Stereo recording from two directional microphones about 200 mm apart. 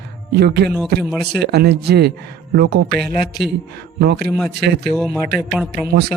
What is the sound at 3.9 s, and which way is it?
Speech, 55° right (ahead or behind).